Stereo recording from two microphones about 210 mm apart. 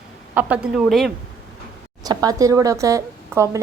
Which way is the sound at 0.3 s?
5° right (ahead or behind).